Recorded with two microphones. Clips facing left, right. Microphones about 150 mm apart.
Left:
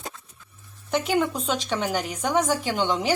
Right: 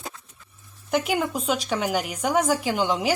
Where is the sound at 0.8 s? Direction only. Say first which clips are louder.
Left 1 dB; 10° right (ahead or behind).